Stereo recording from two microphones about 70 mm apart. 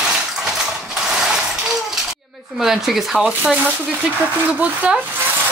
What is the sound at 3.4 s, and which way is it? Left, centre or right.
Speech, centre.